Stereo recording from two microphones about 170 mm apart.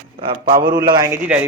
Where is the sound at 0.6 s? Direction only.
25° right (ahead or behind).